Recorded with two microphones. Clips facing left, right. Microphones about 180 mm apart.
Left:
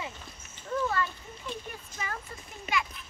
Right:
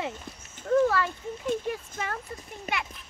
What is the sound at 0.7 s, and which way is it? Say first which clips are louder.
Speech: right 7 dB; 80° right.